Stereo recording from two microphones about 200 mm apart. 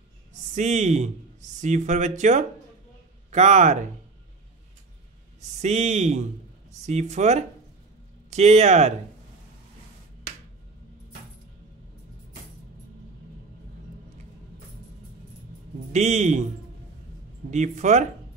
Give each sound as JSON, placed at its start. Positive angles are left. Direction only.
{"t": 0.6, "sound": "speech", "side_deg": -35}
{"t": 5.6, "sound": "speech", "side_deg": -35}
{"t": 15.9, "sound": "speech", "side_deg": -35}
{"t": 17.5, "sound": "speech", "side_deg": -35}